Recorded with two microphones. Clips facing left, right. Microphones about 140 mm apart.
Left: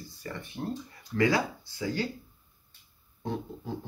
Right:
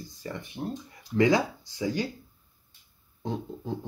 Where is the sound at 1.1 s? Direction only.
20° right (ahead or behind).